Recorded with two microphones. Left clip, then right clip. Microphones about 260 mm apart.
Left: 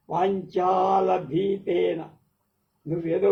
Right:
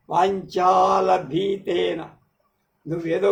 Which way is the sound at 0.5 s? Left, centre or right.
Right.